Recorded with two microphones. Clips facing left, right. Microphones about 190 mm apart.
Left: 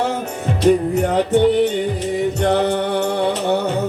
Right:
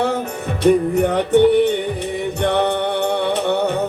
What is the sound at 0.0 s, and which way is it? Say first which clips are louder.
Music: right 1 dB; 60° right (ahead or behind).